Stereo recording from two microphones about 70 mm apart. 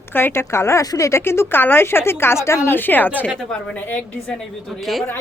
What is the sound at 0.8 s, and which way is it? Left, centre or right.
A woman's voice, left.